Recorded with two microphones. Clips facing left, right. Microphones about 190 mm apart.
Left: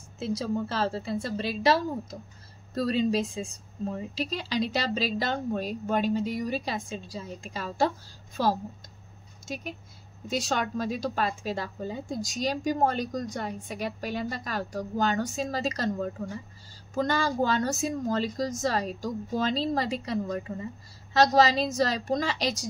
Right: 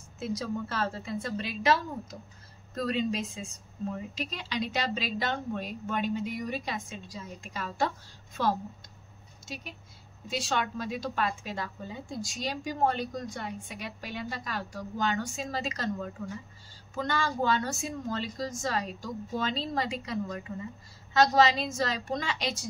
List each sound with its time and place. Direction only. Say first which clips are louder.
0.2 s a woman's voice: left 4 dB; 30° left (ahead or behind)
9.5 s a woman's voice: left 6 dB; 45° left (ahead or behind)